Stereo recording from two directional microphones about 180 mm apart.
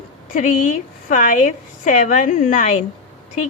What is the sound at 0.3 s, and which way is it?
A woman's voice, 45° left (ahead or behind).